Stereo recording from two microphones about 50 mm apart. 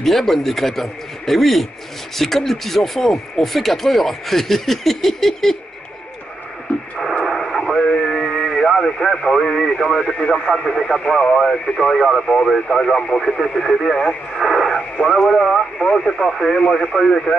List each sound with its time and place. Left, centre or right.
0.0 s speech: centre
7.2 s radio: centre
10.0 s speech: left
12.0 s speech: centre
16.3 s speech: centre
16.5 s speech: centre